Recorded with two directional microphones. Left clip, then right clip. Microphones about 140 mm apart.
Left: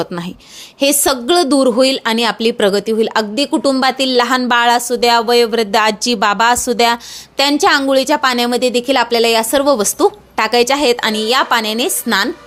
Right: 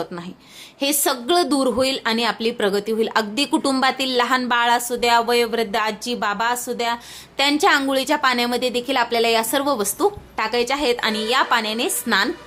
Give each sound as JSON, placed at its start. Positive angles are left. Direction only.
{"t": 0.0, "sound": "a woman's voice", "side_deg": 60}
{"t": 0.8, "sound": "speech", "side_deg": 45}
{"t": 5.7, "sound": "a woman's voice", "side_deg": 55}
{"t": 7.6, "sound": "a woman's voice", "side_deg": 40}